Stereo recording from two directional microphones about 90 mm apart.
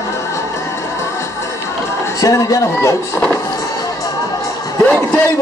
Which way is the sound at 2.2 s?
35° left (ahead or behind).